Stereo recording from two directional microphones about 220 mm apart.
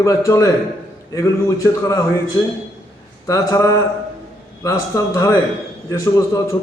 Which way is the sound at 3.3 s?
15° left (ahead or behind).